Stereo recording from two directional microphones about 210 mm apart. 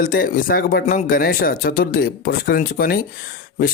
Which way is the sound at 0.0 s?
40° left (ahead or behind).